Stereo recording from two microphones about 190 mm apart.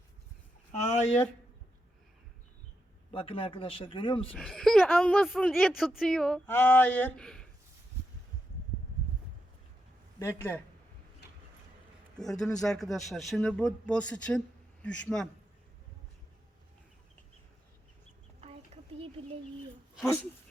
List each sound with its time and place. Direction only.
0.7 s a sound: 35° left (ahead or behind)
3.1 s speech: 30° left (ahead or behind)
4.4 s speech: 5° left (ahead or behind)
10.2 s speech: 10° left (ahead or behind)
12.1 s speech: centre (ahead or behind)
18.3 s a sound: 35° right (ahead or behind)